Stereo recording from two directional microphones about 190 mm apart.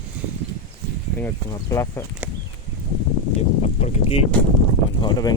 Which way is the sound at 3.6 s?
35° left (ahead or behind).